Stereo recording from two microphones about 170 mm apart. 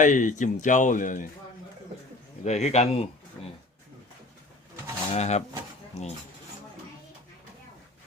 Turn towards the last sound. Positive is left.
turn(degrees=40)  # may be behind; listen again after turning